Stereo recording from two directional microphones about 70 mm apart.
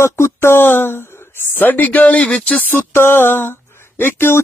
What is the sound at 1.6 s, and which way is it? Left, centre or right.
Speech, left.